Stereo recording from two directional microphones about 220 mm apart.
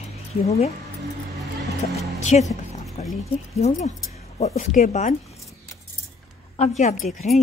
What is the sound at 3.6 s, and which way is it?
Speech, 30° left (ahead or behind).